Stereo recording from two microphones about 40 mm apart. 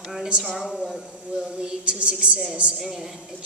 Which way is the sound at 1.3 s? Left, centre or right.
Right.